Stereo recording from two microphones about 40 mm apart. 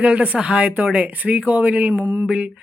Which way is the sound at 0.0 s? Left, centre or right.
Right.